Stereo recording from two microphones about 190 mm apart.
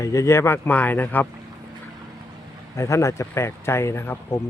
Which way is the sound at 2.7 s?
15° left (ahead or behind).